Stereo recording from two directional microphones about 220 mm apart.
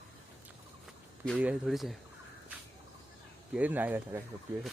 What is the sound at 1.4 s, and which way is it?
Speech, 5° right (ahead or behind).